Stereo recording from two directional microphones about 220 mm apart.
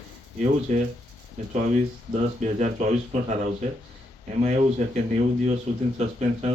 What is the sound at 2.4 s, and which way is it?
Speech, 35° right (ahead or behind).